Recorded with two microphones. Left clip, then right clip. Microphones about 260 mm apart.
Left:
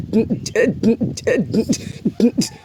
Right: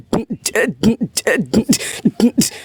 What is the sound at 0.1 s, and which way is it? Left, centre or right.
A man's voice, right.